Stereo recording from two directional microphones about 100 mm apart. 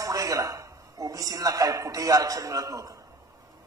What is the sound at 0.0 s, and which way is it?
A man's voice, 35° right (ahead or behind).